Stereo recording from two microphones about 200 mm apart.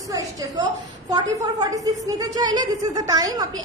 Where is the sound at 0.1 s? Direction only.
20° right (ahead or behind).